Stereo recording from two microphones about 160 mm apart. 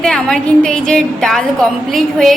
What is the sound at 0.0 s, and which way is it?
A woman's voice, 5° left (ahead or behind).